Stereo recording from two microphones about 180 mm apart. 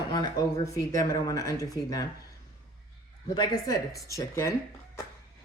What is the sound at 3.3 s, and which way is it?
Speech, 20° left (ahead or behind).